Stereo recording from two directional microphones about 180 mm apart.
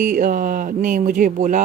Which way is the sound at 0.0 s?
50° right (ahead or behind).